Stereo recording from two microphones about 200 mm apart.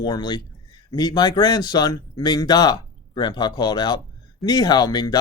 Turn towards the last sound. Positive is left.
turn(degrees=20)  # may be behind; listen again after turning